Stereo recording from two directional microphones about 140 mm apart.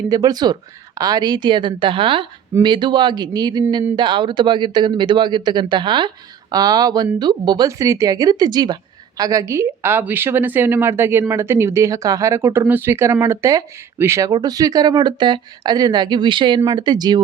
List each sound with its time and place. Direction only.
0.1 s speech: 30° right (ahead or behind)